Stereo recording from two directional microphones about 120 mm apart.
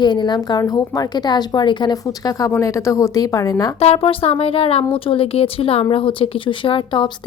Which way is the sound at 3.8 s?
55° left (ahead or behind).